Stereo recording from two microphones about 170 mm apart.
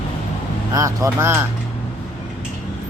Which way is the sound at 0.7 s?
20° right (ahead or behind).